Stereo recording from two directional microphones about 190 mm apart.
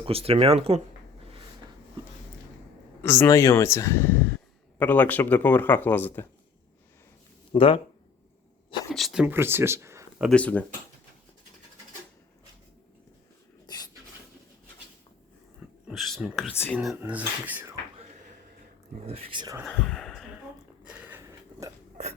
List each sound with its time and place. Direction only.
0.0 s speech: 30° right (ahead or behind)
3.0 s speech: 15° left (ahead or behind)
7.5 s speech: 30° left (ahead or behind)
8.9 s speech: centre (ahead or behind)
9.2 s speech: 10° right (ahead or behind)
10.2 s speech: 5° left (ahead or behind)
13.7 s a sound: 20° left (ahead or behind)
15.9 s a sound: centre (ahead or behind)
16.7 s speech: centre (ahead or behind)
19.0 s speech: 30° right (ahead or behind)
19.6 s a sound: 5° left (ahead or behind)